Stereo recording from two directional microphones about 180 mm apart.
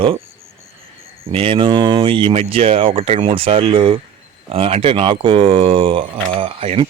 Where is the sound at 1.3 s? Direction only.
30° right (ahead or behind).